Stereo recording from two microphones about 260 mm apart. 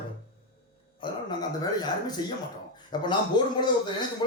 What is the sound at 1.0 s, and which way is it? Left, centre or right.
Speech, centre.